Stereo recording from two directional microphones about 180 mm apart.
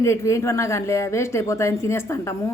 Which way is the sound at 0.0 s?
15° left (ahead or behind).